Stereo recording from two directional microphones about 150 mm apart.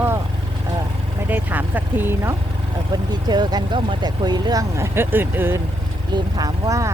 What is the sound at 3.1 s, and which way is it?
Speech, 30° right (ahead or behind).